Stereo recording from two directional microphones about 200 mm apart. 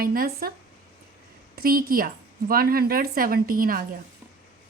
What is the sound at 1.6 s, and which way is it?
A woman's voice, 45° right (ahead or behind).